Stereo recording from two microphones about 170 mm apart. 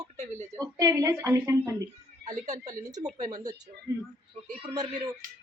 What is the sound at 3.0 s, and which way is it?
Speech, 45° right (ahead or behind).